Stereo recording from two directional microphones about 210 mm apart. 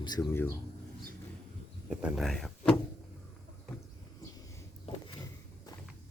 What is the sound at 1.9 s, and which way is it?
Speech, 5° right (ahead or behind).